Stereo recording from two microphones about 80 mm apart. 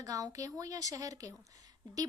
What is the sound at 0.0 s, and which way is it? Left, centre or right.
A woman's voice, right.